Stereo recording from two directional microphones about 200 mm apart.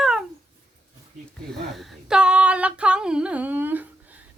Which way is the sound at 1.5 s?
Centre (ahead or behind).